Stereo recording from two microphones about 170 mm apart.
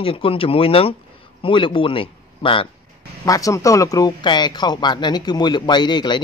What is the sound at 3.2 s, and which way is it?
A man's voice, 20° left (ahead or behind).